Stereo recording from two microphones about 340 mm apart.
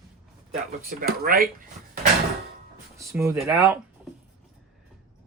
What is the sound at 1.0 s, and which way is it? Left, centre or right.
Speech, right.